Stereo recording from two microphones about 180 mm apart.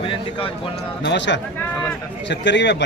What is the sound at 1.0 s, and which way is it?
A man's voice, 75° left (ahead or behind).